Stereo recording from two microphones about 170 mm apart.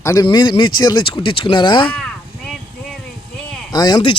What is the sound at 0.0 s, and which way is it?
Speech, 20° left (ahead or behind).